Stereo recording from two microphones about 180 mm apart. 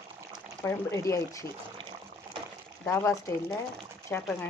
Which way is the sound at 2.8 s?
15° left (ahead or behind).